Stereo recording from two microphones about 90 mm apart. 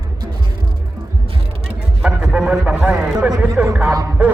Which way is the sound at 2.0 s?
5° right (ahead or behind).